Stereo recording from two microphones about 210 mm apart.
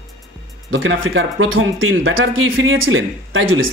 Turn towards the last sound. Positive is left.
turn(degrees=-70)  # may be behind; listen again after turning